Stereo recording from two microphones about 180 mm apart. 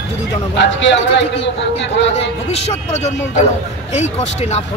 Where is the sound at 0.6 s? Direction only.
90° left.